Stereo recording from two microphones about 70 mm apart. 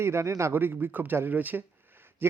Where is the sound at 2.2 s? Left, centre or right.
Right.